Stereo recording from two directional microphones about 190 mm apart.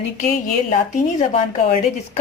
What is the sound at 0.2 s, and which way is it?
Speech, 45° left (ahead or behind).